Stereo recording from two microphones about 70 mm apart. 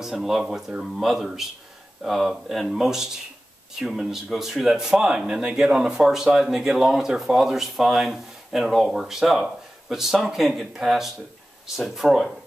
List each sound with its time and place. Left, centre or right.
0.0 s speech: centre